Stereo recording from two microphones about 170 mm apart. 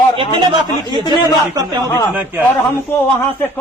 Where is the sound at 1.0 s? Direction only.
25° left (ahead or behind).